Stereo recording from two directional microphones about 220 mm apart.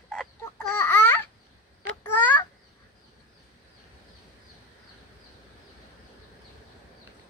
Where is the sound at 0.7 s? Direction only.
10° left (ahead or behind).